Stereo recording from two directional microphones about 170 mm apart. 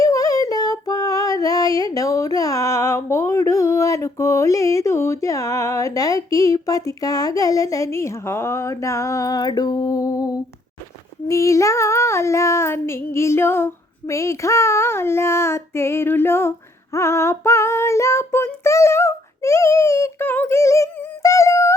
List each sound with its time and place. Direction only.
0.0 s female singing: 20° left (ahead or behind)